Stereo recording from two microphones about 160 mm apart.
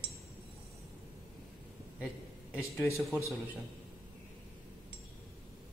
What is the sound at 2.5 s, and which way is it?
Speech, 15° left (ahead or behind).